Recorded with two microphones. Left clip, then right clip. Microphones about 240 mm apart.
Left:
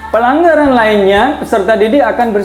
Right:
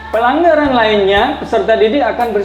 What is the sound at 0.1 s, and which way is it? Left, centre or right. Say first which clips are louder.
A woman's voice: left 2 dB; left.